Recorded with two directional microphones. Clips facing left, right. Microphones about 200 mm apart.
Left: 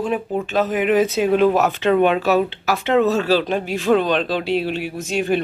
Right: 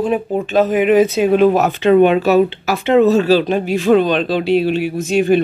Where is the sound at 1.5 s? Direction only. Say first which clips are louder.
Right 4 dB; 25° right (ahead or behind).